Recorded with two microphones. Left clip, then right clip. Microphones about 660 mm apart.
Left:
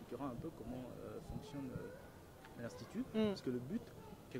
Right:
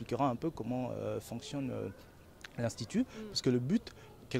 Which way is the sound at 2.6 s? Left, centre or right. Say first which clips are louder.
Right 12 dB; right.